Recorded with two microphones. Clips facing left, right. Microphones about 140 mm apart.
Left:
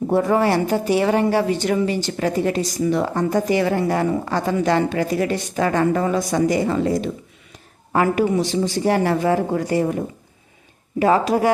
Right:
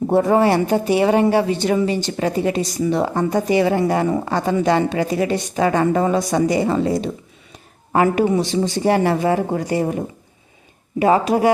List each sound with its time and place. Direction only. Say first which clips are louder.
0.1 s a woman's voice: right 3 dB; 25° right (ahead or behind)
7.9 s a woman's voice: right 2 dB; 25° right (ahead or behind)
11.0 s a woman's voice: right 2 dB; 20° right (ahead or behind)